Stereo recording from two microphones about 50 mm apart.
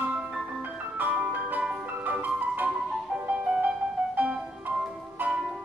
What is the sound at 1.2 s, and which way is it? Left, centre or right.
Music, right.